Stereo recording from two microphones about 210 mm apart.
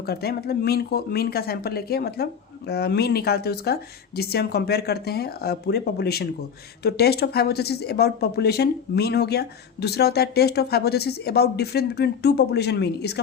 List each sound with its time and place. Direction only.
0.0 s speech: 50° left (ahead or behind)